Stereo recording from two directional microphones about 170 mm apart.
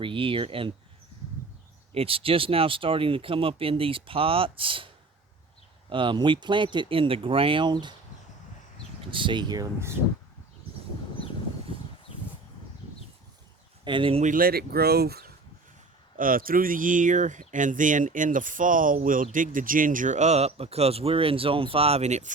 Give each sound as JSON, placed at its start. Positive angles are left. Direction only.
{"t": 0.0, "sound": "speech", "side_deg": -30}
{"t": 1.9, "sound": "speech", "side_deg": -35}
{"t": 5.9, "sound": "speech", "side_deg": -30}
{"t": 9.0, "sound": "speech", "side_deg": -30}
{"t": 13.8, "sound": "speech", "side_deg": -30}
{"t": 14.3, "sound": "speech", "side_deg": -60}
{"t": 16.1, "sound": "speech", "side_deg": -55}